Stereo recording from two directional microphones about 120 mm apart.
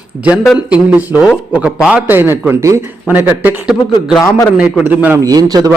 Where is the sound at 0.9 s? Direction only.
15° right (ahead or behind).